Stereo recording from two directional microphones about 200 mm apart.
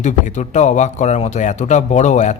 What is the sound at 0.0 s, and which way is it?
Speech, 35° left (ahead or behind).